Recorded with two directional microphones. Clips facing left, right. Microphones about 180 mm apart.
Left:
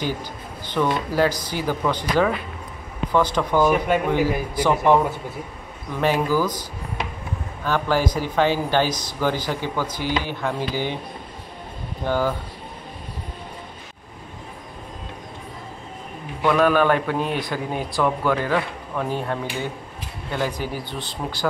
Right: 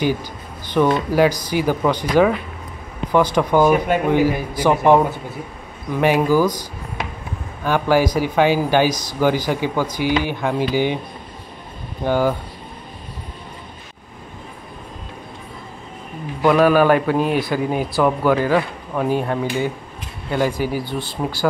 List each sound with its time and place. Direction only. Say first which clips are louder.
0.8 s speech: right 5 dB; 15° right (ahead or behind)
5.9 s speech: right 5 dB; 15° right (ahead or behind)
7.6 s speech: right 5 dB; 10° right (ahead or behind)
12.1 s speech: right 4 dB; 15° right (ahead or behind)
16.4 s speech: right 4 dB; 10° right (ahead or behind)
20.8 s speech: right 6 dB; 20° left (ahead or behind)